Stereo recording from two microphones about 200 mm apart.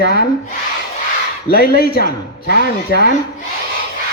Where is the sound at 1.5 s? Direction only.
50° left (ahead or behind).